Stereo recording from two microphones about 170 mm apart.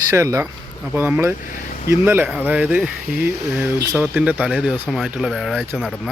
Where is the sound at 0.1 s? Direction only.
15° right (ahead or behind).